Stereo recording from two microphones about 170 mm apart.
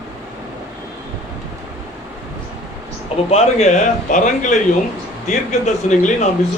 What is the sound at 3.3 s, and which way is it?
A man's voice, 40° left (ahead or behind).